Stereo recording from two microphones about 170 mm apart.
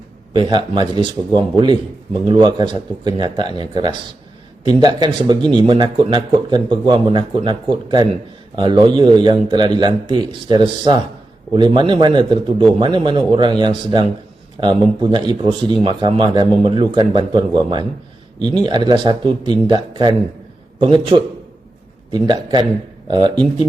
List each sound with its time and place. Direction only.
0.3 s speech: 25° right (ahead or behind)